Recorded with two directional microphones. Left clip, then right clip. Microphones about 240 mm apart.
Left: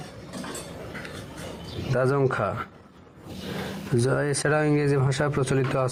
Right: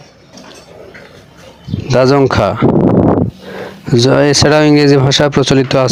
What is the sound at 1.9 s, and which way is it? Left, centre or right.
Speech, right.